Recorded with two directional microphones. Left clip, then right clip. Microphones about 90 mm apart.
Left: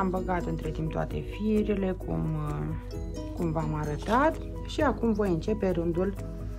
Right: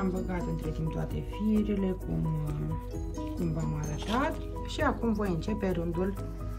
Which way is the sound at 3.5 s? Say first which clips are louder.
Left 5 dB; 25° left (ahead or behind).